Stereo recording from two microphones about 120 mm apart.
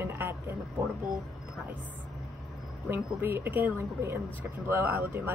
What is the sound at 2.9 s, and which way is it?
Speech, 20° right (ahead or behind).